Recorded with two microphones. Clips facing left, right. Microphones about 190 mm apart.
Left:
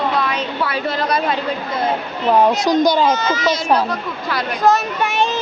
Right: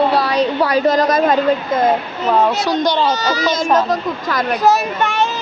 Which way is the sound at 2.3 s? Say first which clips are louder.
Left 1 dB; 15° left (ahead or behind).